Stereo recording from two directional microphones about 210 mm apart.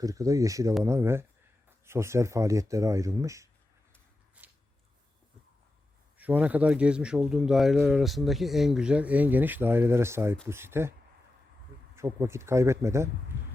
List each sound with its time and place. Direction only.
0.0 s speech: 15° right (ahead or behind)
4.4 s a sound: 5° right (ahead or behind)
6.1 s a man's voice: 10° right (ahead or behind)
11.9 s speech: 15° right (ahead or behind)